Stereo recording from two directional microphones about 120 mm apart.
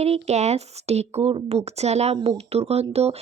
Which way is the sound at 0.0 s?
65° right (ahead or behind).